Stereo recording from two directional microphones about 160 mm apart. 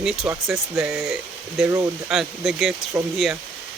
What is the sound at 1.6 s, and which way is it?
Speech, 20° right (ahead or behind).